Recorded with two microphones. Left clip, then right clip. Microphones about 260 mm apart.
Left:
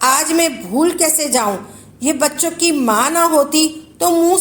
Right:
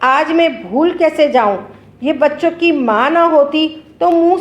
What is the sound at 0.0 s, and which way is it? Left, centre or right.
A woman's voice, left.